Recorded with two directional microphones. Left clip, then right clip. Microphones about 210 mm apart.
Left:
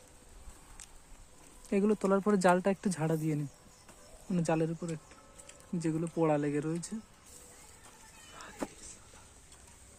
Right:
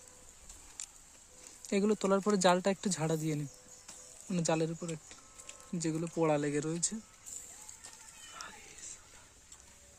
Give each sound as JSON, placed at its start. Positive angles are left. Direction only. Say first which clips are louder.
{"t": 1.7, "sound": "speech", "louder": "left 1 dB", "side_deg": -15}